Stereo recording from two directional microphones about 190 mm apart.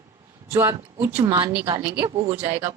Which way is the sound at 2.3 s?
15° right (ahead or behind).